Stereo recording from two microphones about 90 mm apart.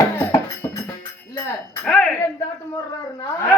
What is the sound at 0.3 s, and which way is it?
Music, 25° left (ahead or behind).